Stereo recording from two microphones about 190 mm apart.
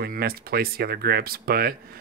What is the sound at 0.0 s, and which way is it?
Speech, 55° right (ahead or behind).